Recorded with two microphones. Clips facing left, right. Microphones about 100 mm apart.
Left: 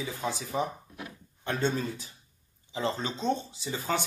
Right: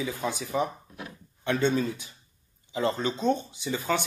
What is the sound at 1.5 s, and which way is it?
Speech, 60° right (ahead or behind).